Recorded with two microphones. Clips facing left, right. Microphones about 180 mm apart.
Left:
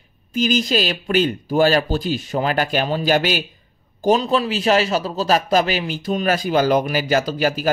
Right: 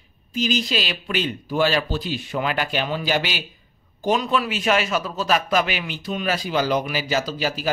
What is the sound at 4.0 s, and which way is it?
A man's voice, 35° left (ahead or behind).